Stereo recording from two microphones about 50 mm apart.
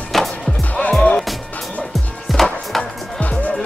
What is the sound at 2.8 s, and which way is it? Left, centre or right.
Music, left.